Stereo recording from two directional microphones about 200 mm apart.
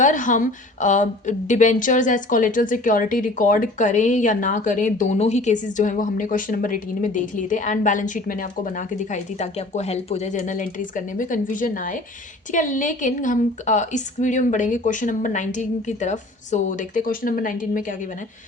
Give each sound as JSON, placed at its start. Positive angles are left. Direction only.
{"t": 0.0, "sound": "a woman's voice", "side_deg": 40}